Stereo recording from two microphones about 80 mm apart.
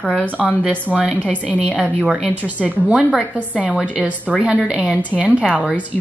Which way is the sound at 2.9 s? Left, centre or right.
Centre.